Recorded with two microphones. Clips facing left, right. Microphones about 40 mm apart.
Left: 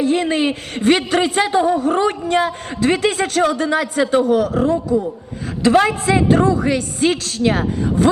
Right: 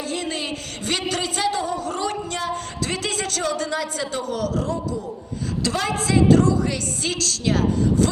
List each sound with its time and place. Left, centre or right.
0.0 s a man's voice: left